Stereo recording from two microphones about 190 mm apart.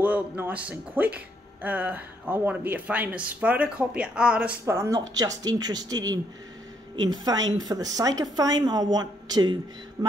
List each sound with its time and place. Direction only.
0.0 s a woman's voice: 10° right (ahead or behind)